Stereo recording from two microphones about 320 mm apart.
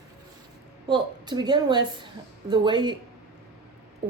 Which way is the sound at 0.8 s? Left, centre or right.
Centre.